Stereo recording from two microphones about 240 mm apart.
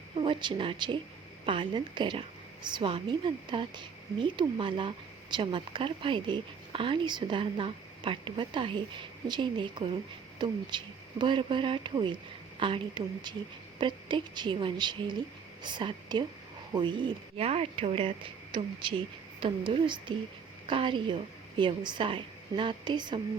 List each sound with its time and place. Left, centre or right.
0.2 s a woman's voice: centre